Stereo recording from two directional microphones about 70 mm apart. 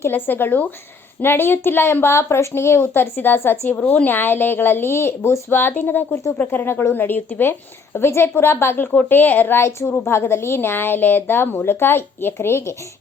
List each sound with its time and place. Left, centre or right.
0.0 s a woman's voice: left